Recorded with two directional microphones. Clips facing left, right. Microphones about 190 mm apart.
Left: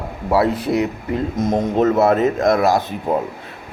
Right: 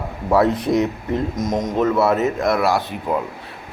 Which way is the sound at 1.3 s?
30° left (ahead or behind).